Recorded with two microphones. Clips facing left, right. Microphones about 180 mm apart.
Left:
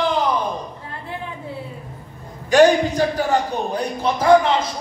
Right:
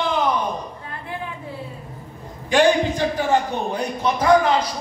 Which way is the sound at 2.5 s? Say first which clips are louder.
Left 3 dB; 40° left (ahead or behind).